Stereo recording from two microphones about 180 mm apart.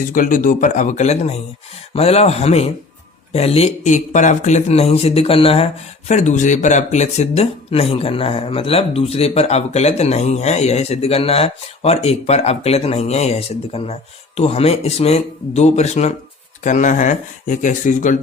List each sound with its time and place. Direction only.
0.0 s a man's voice: 50° left (ahead or behind)